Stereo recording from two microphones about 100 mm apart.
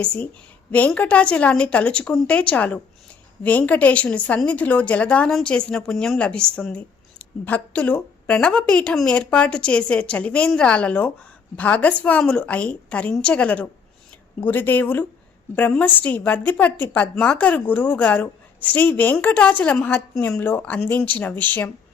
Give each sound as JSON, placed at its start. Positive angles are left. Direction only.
{"t": 0.7, "sound": "speech", "side_deg": 15}